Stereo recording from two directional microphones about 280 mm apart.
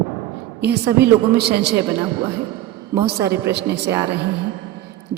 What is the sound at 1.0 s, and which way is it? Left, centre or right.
Speech, right.